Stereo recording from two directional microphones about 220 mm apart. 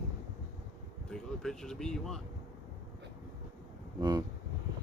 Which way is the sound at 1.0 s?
Centre (ahead or behind).